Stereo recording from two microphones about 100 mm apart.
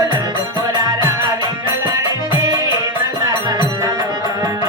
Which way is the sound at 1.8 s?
40° right (ahead or behind).